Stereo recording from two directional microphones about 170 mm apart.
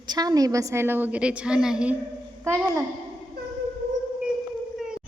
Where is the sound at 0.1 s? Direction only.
20° right (ahead or behind); by 2.0 s 5° right (ahead or behind).